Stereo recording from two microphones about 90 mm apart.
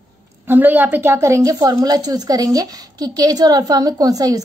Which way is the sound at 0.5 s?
20° right (ahead or behind).